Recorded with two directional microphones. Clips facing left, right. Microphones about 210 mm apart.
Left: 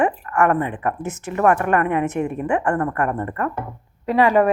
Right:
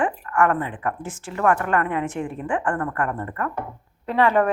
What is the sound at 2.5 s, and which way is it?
A woman's voice, 25° left (ahead or behind).